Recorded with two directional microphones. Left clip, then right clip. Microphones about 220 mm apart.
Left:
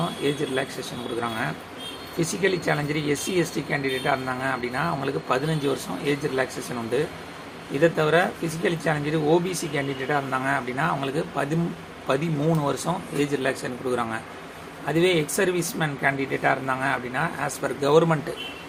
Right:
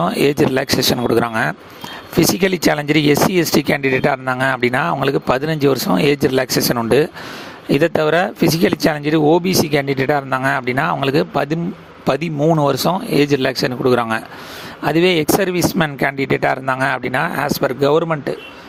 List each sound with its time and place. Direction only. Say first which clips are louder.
0.0 s speech: right 11 dB; 45° right (ahead or behind); by 18.3 s 30° right (ahead or behind)